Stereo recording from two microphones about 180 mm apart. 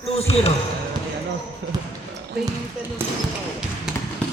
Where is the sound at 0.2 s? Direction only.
35° left (ahead or behind).